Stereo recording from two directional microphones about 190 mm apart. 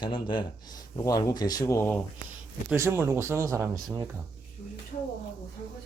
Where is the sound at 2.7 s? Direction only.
10° right (ahead or behind).